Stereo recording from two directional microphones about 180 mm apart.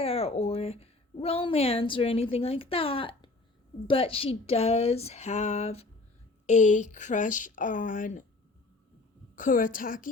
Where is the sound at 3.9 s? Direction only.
30° left (ahead or behind).